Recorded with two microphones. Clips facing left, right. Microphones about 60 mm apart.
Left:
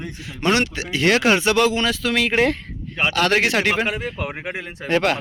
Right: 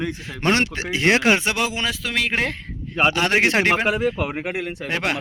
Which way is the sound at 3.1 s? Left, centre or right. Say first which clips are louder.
Left 2 dB; right.